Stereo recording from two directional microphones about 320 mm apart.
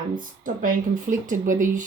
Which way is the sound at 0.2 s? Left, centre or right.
Right.